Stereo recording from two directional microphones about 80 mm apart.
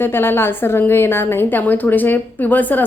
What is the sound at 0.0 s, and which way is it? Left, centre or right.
A woman's voice, left.